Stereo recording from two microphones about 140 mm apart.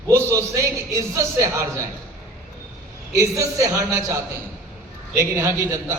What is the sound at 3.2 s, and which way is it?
A man's voice, 20° right (ahead or behind).